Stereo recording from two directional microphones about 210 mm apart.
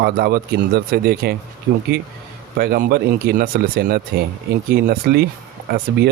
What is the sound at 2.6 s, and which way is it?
Speech, 45° right (ahead or behind).